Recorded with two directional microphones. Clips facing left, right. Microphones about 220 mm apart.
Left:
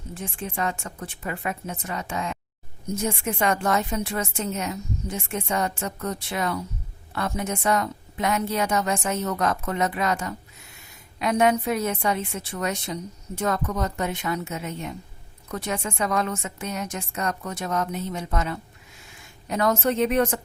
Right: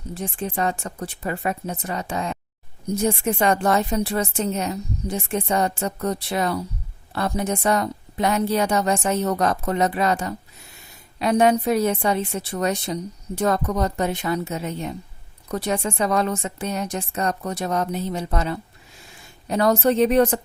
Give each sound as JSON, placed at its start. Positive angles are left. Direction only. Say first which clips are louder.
{"t": 0.1, "sound": "a woman's voice", "louder": "right 5 dB", "side_deg": -35}